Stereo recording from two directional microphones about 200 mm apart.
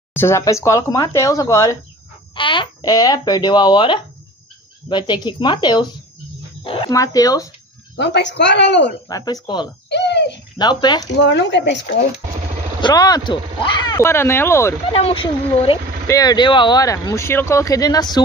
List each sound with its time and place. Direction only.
0.1 s speech: 10° left (ahead or behind)
7.9 s a woman's voice: 60° left (ahead or behind)
9.1 s speech: 20° left (ahead or behind)
9.8 s bird: 60° left (ahead or behind)
10.6 s speech: 20° left (ahead or behind)
11.1 s a woman's voice: 60° left (ahead or behind)
12.8 s speech: 20° left (ahead or behind)
14.9 s speech: 30° left (ahead or behind)